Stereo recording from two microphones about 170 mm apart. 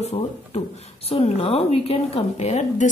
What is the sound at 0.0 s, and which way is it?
Speech, 40° left (ahead or behind).